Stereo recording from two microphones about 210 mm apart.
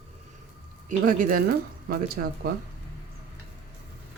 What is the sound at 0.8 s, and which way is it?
Speech, 40° right (ahead or behind).